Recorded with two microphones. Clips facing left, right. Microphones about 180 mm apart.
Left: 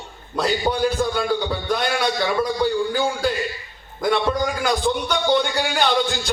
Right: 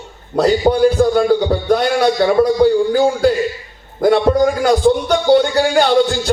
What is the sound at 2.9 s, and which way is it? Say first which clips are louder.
Music: right 9 dB; 50° right (ahead or behind).